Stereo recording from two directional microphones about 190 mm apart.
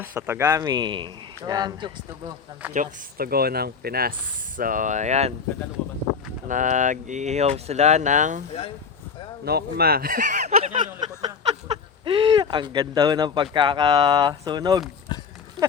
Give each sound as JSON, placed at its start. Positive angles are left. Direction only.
{"t": 0.0, "sound": "speech", "side_deg": -10}
{"t": 2.7, "sound": "speech", "side_deg": -50}
{"t": 6.5, "sound": "speech", "side_deg": -40}
{"t": 9.4, "sound": "speech", "side_deg": -55}
{"t": 12.0, "sound": "speech", "side_deg": -25}
{"t": 15.1, "sound": "a sound", "side_deg": 20}